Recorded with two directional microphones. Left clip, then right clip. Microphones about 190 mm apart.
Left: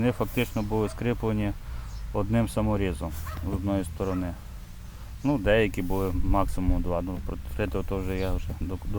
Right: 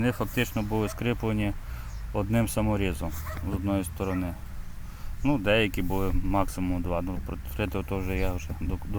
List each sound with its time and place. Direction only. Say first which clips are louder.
0.0 s speech: left 1 dB; 5° left (ahead or behind)